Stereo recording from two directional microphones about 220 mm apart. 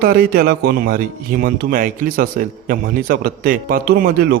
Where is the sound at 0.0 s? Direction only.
40° right (ahead or behind).